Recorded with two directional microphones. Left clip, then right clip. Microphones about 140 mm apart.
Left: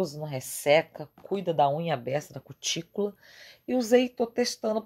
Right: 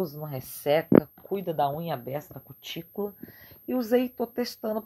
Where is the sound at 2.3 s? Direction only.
40° left (ahead or behind).